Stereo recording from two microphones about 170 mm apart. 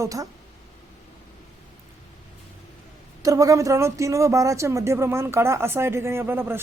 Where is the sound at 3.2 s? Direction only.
20° right (ahead or behind).